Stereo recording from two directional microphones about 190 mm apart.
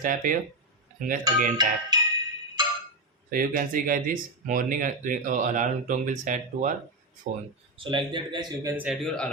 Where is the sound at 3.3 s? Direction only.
45° right (ahead or behind).